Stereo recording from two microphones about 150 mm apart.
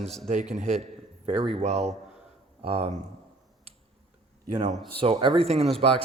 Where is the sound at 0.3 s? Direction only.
50° right (ahead or behind).